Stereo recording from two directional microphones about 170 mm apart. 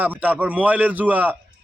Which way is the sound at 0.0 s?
10° right (ahead or behind).